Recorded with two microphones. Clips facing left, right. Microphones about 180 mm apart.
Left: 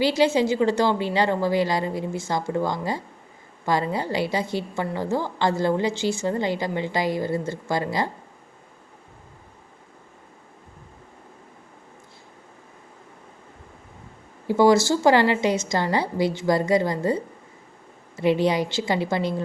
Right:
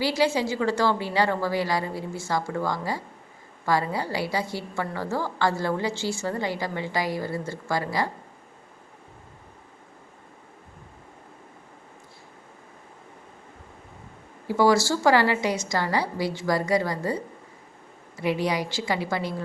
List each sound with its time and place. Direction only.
0.0 s a woman's voice: 20° left (ahead or behind)
14.4 s a woman's voice: 20° left (ahead or behind)
18.2 s a woman's voice: 25° left (ahead or behind)